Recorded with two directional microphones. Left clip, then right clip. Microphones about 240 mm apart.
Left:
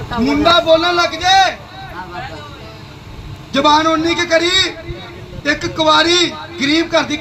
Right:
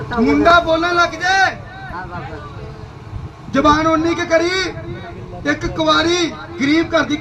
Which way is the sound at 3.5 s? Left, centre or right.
Right.